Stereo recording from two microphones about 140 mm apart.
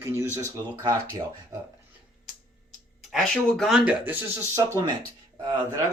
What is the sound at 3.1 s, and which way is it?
Speech, centre (ahead or behind).